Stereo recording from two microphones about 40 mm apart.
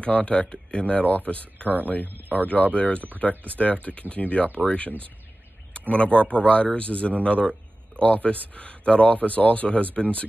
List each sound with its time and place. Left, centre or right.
0.0 s speech: left